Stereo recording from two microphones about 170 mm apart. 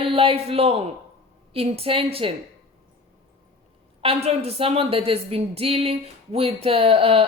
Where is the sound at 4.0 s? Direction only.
35° right (ahead or behind).